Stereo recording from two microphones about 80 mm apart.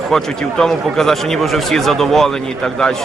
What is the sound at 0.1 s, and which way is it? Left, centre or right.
Speech, centre.